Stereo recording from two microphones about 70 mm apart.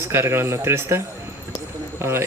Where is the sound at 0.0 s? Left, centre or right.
Right.